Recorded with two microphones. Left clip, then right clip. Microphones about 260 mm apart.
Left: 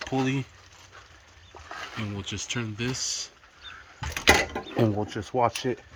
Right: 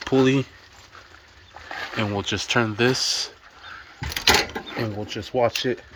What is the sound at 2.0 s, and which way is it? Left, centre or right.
Speech, centre.